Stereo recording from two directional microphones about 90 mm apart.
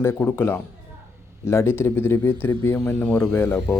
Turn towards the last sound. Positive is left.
turn(degrees=25)  # may be behind; listen again after turning